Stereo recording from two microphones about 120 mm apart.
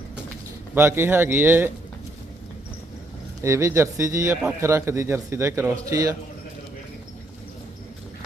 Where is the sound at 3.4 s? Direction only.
25° right (ahead or behind).